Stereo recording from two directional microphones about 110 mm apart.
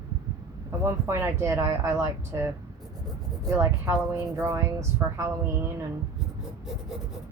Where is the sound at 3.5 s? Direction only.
25° right (ahead or behind).